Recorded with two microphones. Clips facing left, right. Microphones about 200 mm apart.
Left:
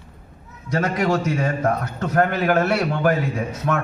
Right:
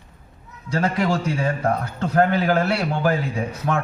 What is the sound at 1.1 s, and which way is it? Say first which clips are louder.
A man's voice: left 2 dB; 30° right (ahead or behind).